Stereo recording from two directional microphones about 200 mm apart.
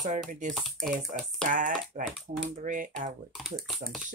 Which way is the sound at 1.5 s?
40° right (ahead or behind).